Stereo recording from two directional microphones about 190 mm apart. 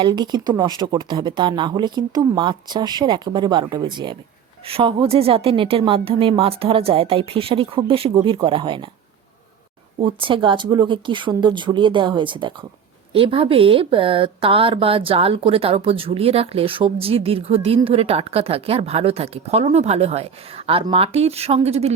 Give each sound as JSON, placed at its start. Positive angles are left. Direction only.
{"t": 0.0, "sound": "speech", "side_deg": -20}
{"t": 10.0, "sound": "a woman's voice", "side_deg": -25}